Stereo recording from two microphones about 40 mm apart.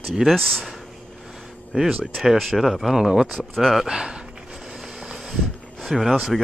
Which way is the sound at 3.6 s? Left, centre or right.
Centre.